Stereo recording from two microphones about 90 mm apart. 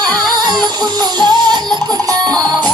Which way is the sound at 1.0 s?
50° right (ahead or behind).